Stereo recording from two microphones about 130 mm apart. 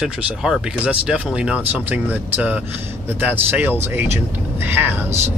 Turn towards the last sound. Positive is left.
turn(degrees=-55)  # may be behind; listen again after turning